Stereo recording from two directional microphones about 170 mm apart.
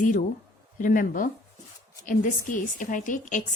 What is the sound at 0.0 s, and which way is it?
A woman's voice, 50° left (ahead or behind).